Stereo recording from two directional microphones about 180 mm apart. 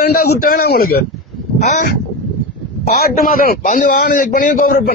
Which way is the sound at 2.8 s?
55° left (ahead or behind).